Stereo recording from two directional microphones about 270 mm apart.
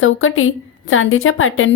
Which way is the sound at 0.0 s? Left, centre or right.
Left.